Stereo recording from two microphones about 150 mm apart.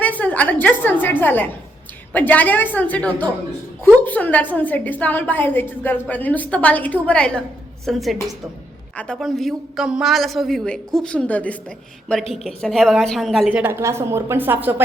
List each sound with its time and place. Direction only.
0.0 s a woman's voice: 10° left (ahead or behind)
13.5 s a woman's voice: 15° right (ahead or behind)